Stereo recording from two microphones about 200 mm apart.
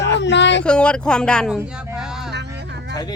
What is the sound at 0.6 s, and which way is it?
Speech, 5° left (ahead or behind).